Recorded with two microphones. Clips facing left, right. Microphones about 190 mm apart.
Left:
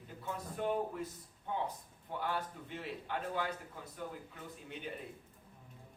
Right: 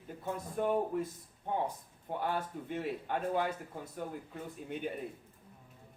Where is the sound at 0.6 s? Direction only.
45° right (ahead or behind).